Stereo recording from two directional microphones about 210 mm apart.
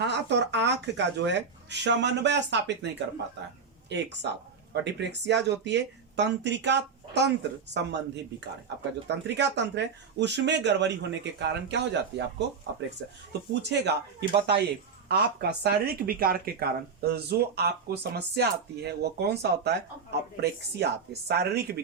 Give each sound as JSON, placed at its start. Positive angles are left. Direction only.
{"t": 0.0, "sound": "speech", "side_deg": -55}
{"t": 13.5, "sound": "speech", "side_deg": -55}